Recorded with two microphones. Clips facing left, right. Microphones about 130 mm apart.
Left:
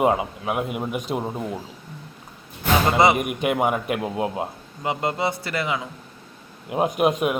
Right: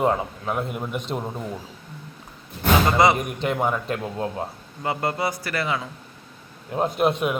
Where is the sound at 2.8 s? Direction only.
20° left (ahead or behind).